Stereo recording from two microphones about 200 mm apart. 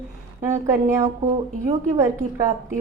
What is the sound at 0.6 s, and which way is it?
Speech, 15° right (ahead or behind).